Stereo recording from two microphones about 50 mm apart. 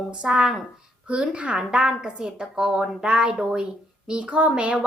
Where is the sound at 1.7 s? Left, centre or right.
Centre.